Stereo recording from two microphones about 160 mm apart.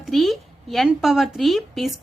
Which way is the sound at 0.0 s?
Centre (ahead or behind).